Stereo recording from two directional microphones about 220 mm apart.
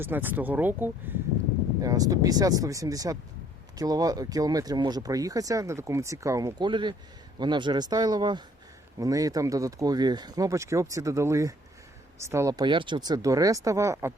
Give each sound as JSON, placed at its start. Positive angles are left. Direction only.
{"t": 0.0, "sound": "speech", "side_deg": -10}